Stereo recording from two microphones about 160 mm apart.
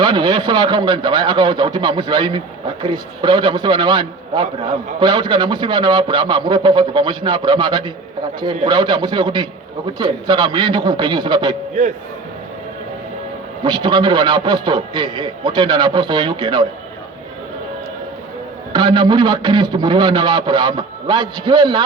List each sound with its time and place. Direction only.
0.0 s a man's voice: 30° right (ahead or behind)
13.7 s a man's voice: 30° right (ahead or behind)
18.7 s a man's voice: 30° right (ahead or behind)